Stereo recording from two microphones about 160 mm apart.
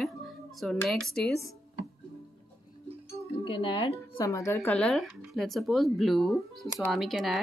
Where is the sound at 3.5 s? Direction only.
35° left (ahead or behind).